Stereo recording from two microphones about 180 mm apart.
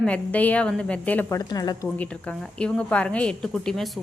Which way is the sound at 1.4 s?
20° left (ahead or behind).